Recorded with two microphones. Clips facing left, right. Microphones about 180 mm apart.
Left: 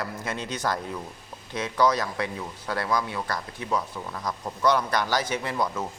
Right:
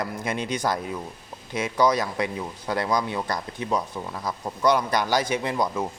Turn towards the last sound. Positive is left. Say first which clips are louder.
# right 3 dB
turn(degrees=-15)  # may be behind; listen again after turning